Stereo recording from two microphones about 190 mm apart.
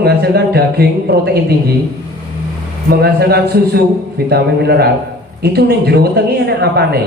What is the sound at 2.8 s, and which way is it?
A man's voice, 55° right (ahead or behind).